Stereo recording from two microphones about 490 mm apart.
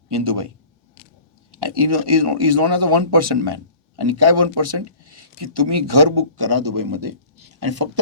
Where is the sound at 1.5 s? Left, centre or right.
Right.